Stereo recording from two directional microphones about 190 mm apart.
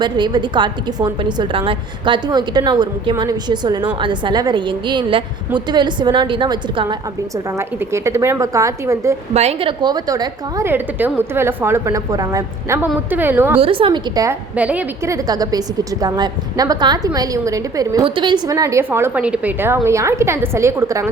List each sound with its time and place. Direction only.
0.0 s a woman's voice: 25° right (ahead or behind)
7.5 s a woman's voice: 15° right (ahead or behind)
9.3 s a woman's voice: 35° right (ahead or behind); by 13.6 s 10° right (ahead or behind)
13.6 s a woman's voice: 30° right (ahead or behind)
14.5 s a woman's voice: 5° right (ahead or behind)